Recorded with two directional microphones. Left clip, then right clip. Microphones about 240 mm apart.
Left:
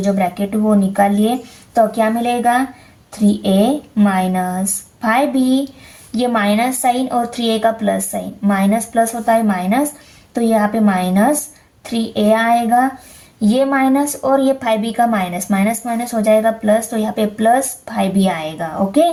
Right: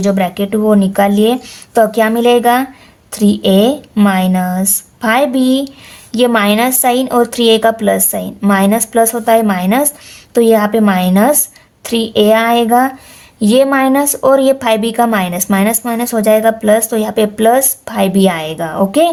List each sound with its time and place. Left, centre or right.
0.0 s speech: right